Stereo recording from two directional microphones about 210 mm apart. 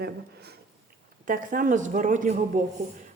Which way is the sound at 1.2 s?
40° right (ahead or behind).